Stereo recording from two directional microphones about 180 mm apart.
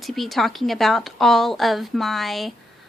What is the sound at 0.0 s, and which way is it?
A woman's voice, centre (ahead or behind).